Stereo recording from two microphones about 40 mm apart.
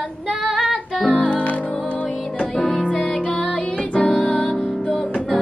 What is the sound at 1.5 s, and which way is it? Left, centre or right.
Music, left.